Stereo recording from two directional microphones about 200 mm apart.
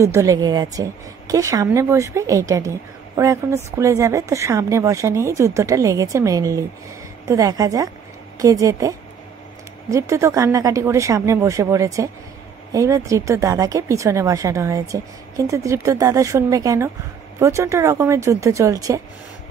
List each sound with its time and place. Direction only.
0.0 s speech: 15° right (ahead or behind)